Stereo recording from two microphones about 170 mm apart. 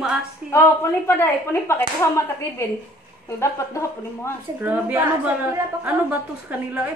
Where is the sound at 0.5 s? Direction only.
15° left (ahead or behind).